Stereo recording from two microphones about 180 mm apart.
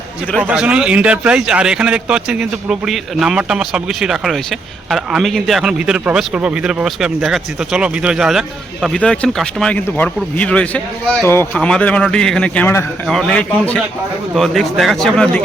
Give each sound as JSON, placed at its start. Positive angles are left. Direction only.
{"t": 0.4, "sound": "a man's voice", "side_deg": -5}